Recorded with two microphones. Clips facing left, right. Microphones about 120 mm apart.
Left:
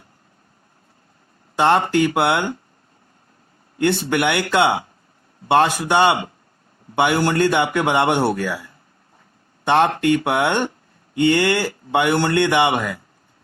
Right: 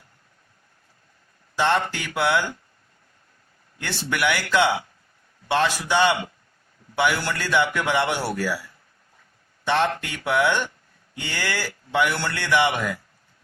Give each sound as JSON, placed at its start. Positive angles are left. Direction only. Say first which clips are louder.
{"t": 1.5, "sound": "speech", "louder": "left 6 dB", "side_deg": 55}
{"t": 3.8, "sound": "speech", "louder": "left 9 dB", "side_deg": 55}